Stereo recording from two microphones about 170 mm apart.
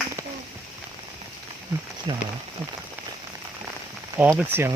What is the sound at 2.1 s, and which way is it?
Speech, 25° right (ahead or behind).